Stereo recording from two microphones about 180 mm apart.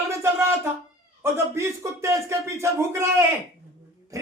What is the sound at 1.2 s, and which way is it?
Speech, 15° right (ahead or behind).